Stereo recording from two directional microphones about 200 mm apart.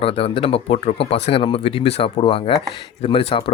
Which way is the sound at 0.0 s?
30° left (ahead or behind).